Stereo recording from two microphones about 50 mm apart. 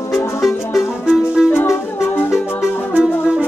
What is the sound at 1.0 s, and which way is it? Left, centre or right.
Music, centre.